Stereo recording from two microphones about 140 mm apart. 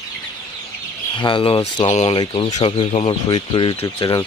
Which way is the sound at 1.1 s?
35° left (ahead or behind).